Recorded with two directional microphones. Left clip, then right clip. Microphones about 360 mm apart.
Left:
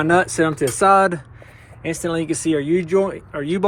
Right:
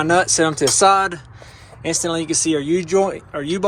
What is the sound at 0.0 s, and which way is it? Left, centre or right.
Speech, centre.